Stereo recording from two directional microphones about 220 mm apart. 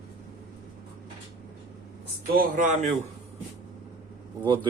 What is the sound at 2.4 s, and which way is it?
Speech, 35° right (ahead or behind).